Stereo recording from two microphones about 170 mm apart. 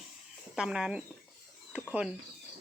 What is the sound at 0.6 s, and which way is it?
Speech, 5° right (ahead or behind).